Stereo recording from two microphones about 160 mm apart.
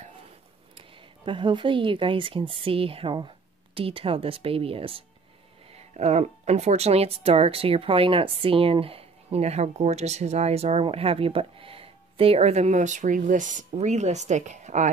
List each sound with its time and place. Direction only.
0.7 s speech: 30° right (ahead or behind); by 14.9 s 50° right (ahead or behind)